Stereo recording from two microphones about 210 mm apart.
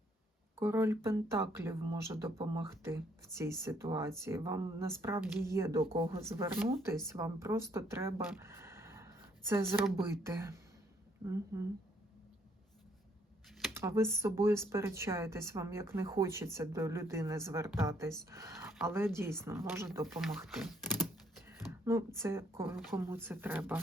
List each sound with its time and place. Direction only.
0.5 s speech: 10° right (ahead or behind)
13.7 s speech: 10° right (ahead or behind)
20.1 s speech: centre (ahead or behind)
21.4 s speech: 10° right (ahead or behind)